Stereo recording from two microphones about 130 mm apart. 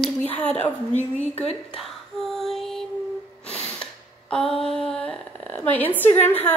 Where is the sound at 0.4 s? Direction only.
10° left (ahead or behind).